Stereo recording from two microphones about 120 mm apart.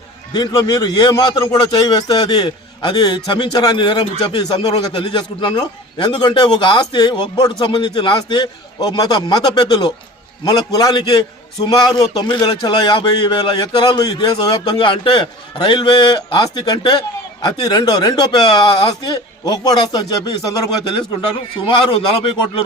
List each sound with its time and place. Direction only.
0.3 s a man's voice: 35° left (ahead or behind)